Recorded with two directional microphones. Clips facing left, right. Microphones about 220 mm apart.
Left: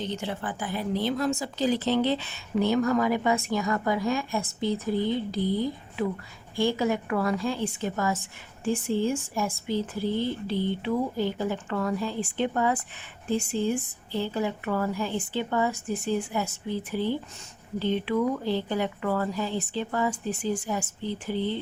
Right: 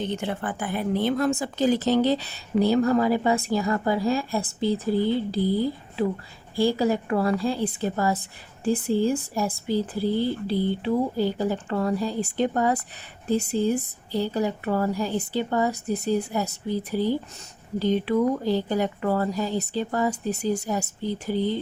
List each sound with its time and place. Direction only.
0.0 s a woman's voice: 55° right (ahead or behind)